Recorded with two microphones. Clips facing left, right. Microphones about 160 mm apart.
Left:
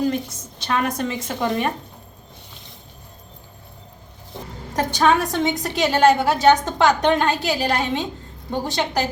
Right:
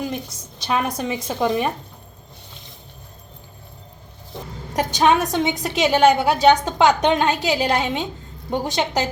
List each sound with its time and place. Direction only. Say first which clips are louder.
0.7 s a woman's voice: even; 15° right (ahead or behind)
4.7 s a woman's voice: right 1 dB; 20° right (ahead or behind)